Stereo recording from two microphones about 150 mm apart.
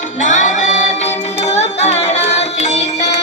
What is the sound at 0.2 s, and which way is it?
Music, 55° left (ahead or behind).